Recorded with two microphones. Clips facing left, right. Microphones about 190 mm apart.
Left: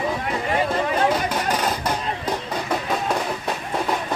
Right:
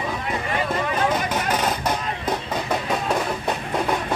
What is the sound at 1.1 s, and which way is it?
Vehicle, 10° left (ahead or behind).